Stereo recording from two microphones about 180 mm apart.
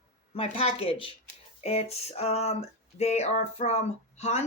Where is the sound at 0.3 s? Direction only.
30° left (ahead or behind).